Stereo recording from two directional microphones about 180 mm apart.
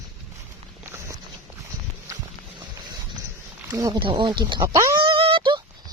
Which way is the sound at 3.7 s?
20° right (ahead or behind).